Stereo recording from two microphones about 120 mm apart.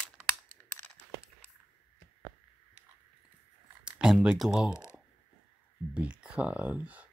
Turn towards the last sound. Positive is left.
turn(degrees=-10)  # may be behind; listen again after turning